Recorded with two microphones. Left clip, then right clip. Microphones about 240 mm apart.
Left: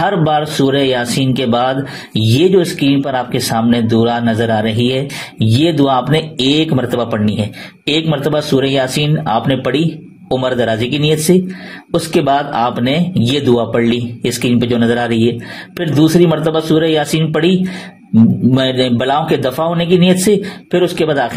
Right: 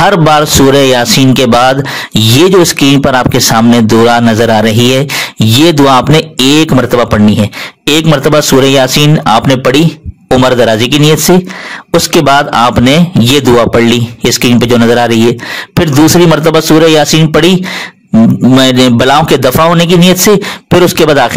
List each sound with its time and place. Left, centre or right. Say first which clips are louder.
0.0 s a man's voice: right 8 dB; right
18.6 s a man's voice: right 9 dB; right